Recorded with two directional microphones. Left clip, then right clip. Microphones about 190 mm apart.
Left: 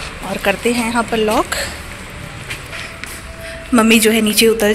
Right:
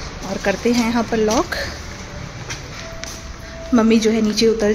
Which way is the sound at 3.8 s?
5° right (ahead or behind).